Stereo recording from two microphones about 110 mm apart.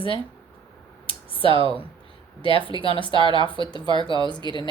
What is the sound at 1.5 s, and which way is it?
Speech, 55° left (ahead or behind).